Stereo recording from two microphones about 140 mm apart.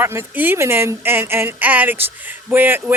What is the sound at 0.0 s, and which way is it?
Speech, 15° right (ahead or behind).